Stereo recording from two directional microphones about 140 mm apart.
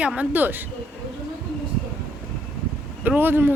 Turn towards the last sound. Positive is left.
turn(degrees=-15)  # may be behind; listen again after turning